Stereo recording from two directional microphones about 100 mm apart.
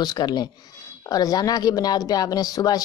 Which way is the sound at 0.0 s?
40° left (ahead or behind).